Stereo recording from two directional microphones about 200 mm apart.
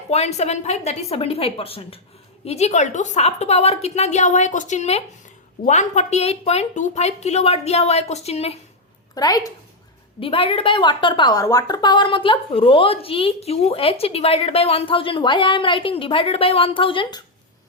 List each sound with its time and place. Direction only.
0.1 s a woman's voice: 35° left (ahead or behind)
9.1 s a woman's voice: 20° left (ahead or behind)